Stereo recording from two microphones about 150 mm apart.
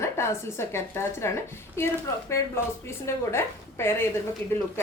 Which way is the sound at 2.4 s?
20° left (ahead or behind).